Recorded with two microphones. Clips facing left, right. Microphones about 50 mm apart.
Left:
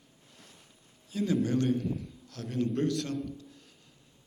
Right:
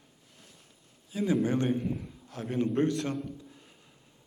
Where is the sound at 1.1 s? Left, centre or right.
Centre.